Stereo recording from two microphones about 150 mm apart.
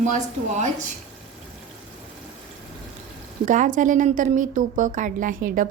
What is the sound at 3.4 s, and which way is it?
Speech, 60° right (ahead or behind).